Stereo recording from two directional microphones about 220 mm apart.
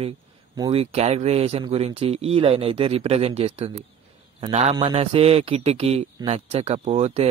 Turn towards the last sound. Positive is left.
turn(degrees=-25)  # may be behind; listen again after turning